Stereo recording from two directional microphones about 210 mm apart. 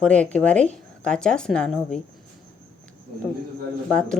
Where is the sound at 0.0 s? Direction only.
5° left (ahead or behind).